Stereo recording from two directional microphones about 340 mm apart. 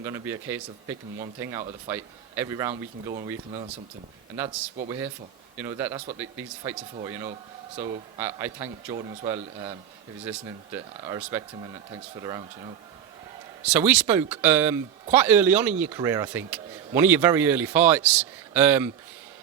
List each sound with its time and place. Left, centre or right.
0.0 s speech: centre
4.9 s speech: centre